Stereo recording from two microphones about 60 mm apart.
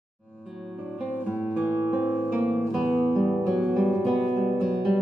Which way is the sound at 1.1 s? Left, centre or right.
Right.